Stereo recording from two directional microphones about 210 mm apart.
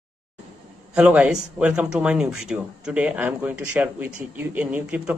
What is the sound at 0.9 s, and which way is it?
Speech, 5° right (ahead or behind).